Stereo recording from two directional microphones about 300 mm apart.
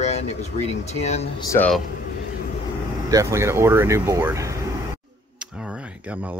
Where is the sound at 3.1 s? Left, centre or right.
Centre.